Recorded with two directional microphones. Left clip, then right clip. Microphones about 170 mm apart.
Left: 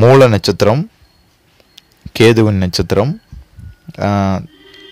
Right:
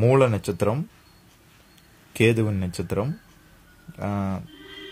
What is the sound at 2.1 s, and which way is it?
Speech, 50° left (ahead or behind).